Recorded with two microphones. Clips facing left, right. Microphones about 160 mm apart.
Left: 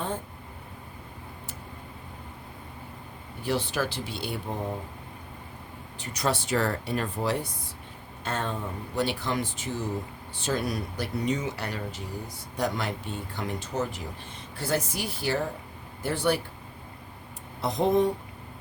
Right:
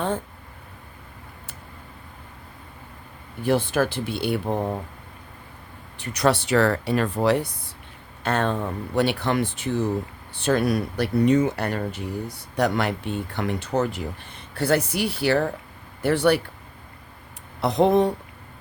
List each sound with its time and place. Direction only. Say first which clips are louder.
3.4 s speech: right 7 dB; 50° right (ahead or behind)
6.0 s speech: right 7 dB; 70° right (ahead or behind)
17.6 s speech: right 5 dB; 70° right (ahead or behind)